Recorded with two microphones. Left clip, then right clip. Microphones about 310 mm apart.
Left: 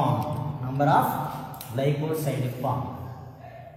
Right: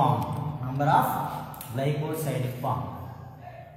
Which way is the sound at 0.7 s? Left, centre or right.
Centre.